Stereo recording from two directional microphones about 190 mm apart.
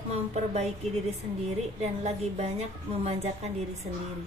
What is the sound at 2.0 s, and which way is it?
Speech, 35° right (ahead or behind).